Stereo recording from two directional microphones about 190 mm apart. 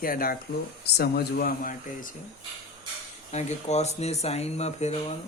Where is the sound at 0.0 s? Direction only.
50° left (ahead or behind).